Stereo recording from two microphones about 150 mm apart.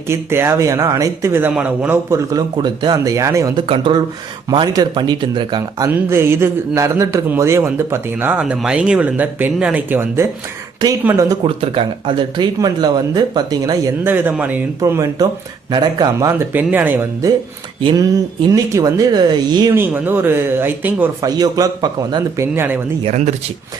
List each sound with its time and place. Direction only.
0.1 s speech: 15° right (ahead or behind)
3.7 s speech: 35° right (ahead or behind)
5.9 s a man's voice: 15° right (ahead or behind)
11.4 s speech: 35° right (ahead or behind)
14.1 s a man's voice: 10° right (ahead or behind)
14.8 s speech: 20° right (ahead or behind)
16.5 s a man's voice: 10° right (ahead or behind)
17.8 s speech: 25° right (ahead or behind)
19.7 s a man's voice: 15° right (ahead or behind)
21.2 s speech: 25° right (ahead or behind)
23.0 s speech: 50° right (ahead or behind)